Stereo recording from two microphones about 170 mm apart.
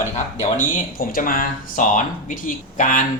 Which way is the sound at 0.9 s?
55° left (ahead or behind).